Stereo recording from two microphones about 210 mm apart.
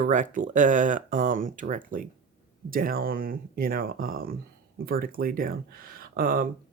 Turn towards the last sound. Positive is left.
turn(degrees=-40)  # may be behind; listen again after turning